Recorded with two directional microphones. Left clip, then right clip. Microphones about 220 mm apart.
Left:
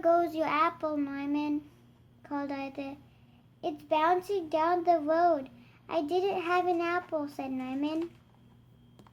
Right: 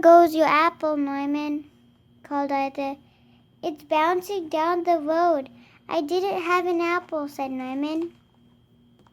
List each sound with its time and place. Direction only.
0.0 s a child's voice: 45° right (ahead or behind)